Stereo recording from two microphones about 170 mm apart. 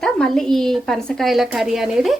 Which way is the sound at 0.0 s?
5° left (ahead or behind).